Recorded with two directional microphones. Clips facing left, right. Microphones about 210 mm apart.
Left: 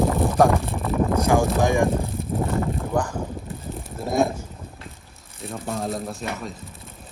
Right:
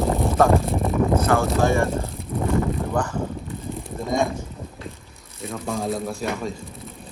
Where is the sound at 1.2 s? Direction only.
15° left (ahead or behind).